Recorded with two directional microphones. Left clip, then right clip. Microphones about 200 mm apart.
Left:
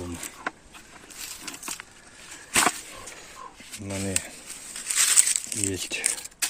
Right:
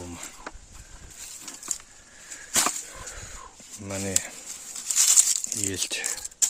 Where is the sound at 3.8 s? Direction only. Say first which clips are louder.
Right 1 dB; 15° right (ahead or behind).